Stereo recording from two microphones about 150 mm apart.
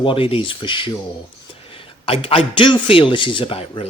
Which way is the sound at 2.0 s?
40° left (ahead or behind).